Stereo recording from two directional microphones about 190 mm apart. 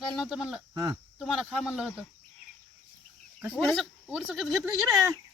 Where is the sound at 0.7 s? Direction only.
20° right (ahead or behind).